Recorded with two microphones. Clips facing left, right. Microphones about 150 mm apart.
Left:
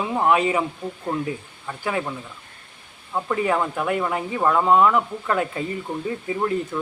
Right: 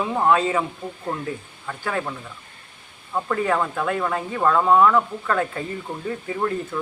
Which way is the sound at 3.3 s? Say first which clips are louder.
Even; 15° left (ahead or behind).